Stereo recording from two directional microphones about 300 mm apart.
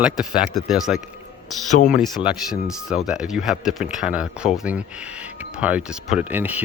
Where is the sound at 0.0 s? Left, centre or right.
Centre.